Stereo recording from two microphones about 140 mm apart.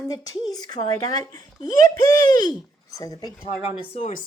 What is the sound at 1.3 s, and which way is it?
Speech, 25° left (ahead or behind).